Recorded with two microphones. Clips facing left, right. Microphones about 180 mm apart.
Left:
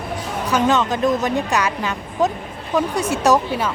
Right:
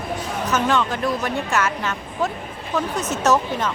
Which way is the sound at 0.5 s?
20° left (ahead or behind).